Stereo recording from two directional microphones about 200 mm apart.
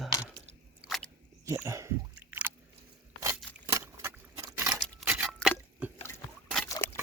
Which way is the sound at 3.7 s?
10° right (ahead or behind).